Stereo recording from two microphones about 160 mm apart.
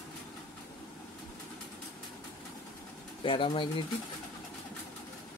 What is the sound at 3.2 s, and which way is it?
Speech, 30° left (ahead or behind).